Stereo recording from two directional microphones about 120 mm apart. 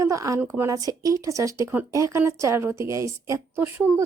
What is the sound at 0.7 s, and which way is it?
Speech, 30° right (ahead or behind).